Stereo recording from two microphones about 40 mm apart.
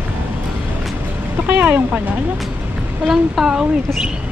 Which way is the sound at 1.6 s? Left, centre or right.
Right.